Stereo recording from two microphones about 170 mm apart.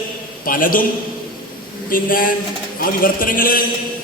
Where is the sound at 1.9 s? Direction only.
55° left (ahead or behind).